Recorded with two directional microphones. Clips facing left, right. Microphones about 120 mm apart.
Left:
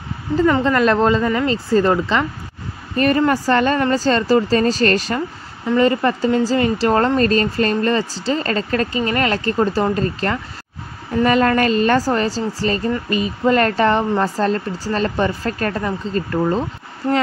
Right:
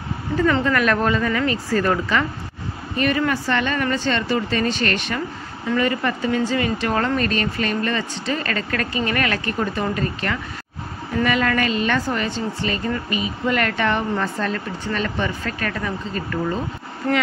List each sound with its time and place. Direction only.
0.4 s speech: 25° left (ahead or behind)
3.0 s a woman's voice: 40° left (ahead or behind)